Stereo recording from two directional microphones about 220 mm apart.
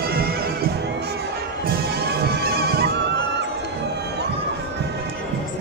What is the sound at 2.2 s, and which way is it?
Neigh, 45° right (ahead or behind).